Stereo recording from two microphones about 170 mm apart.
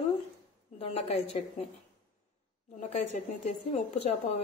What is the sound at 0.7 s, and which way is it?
Speech, 40° left (ahead or behind).